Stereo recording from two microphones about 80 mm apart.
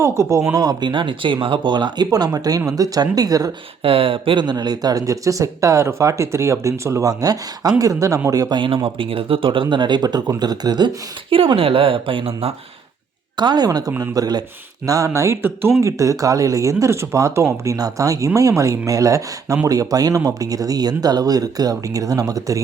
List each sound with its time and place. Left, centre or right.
0.0 s speech: right
0.5 s speech: right
2.0 s speech: right
4.1 s speech: right
4.5 s speech: right
8.5 s speech: right
13.3 s speech: right
13.7 s speech: right
14.8 s speech: right